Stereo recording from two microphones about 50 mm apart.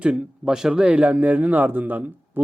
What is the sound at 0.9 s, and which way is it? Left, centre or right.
Speech, right.